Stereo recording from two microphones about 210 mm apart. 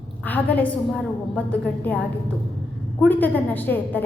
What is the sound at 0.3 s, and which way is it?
A woman's voice, 10° left (ahead or behind).